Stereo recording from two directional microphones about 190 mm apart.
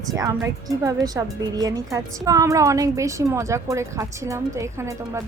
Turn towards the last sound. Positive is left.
turn(degrees=-15)  # may be behind; listen again after turning